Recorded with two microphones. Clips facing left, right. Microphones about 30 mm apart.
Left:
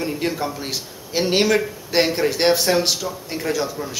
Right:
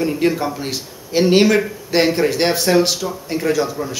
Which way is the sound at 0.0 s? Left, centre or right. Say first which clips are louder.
Right 6 dB; centre.